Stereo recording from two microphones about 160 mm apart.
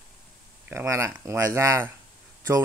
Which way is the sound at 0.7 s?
15° right (ahead or behind).